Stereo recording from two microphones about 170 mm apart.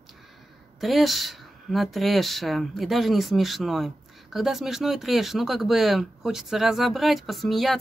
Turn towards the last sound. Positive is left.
turn(degrees=0)  # may be behind; listen again after turning